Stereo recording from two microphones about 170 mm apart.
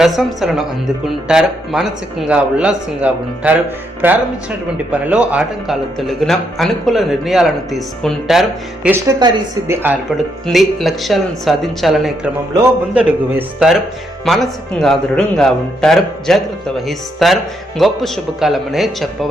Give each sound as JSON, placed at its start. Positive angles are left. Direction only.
{"t": 0.0, "sound": "a woman's voice", "side_deg": 0}
{"t": 8.9, "sound": "a woman's voice", "side_deg": -20}
{"t": 10.4, "sound": "a woman's voice", "side_deg": 0}